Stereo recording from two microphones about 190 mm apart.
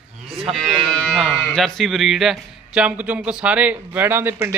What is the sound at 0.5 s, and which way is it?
A man's voice, centre (ahead or behind).